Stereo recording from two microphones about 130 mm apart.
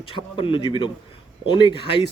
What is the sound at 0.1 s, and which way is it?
Speech, 40° left (ahead or behind).